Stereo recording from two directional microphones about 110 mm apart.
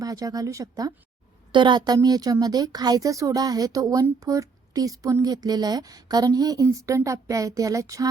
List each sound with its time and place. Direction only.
0.0 s speech: 35° right (ahead or behind)
1.5 s speech: 45° right (ahead or behind)